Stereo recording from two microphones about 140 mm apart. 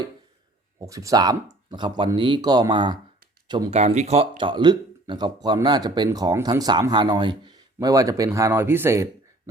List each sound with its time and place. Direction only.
0.8 s speech: 25° right (ahead or behind)
3.7 s speech: 50° right (ahead or behind); by 9.0 s 20° right (ahead or behind)